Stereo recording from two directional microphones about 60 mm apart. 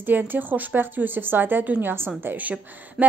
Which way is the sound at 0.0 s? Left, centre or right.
Right.